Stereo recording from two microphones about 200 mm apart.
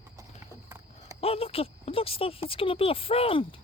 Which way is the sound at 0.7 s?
15° right (ahead or behind).